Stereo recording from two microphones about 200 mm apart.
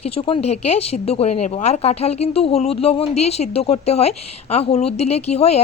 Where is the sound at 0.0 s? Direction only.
30° left (ahead or behind).